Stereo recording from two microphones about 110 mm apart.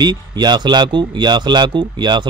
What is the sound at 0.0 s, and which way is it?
Speech, 40° right (ahead or behind).